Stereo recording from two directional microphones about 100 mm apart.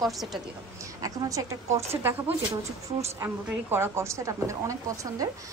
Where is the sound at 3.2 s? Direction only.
25° right (ahead or behind).